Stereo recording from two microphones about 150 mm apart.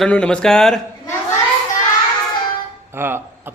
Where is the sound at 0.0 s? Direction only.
5° left (ahead or behind).